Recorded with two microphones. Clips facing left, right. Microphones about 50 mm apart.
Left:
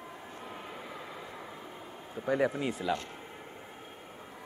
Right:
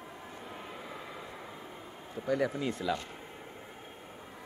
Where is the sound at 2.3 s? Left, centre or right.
Left.